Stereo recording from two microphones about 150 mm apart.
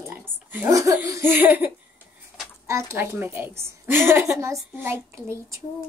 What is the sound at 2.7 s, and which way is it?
A woman's voice, 20° right (ahead or behind).